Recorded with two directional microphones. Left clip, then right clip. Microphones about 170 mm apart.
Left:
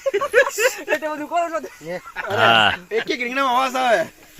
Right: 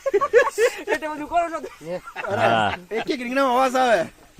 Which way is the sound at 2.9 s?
90° right.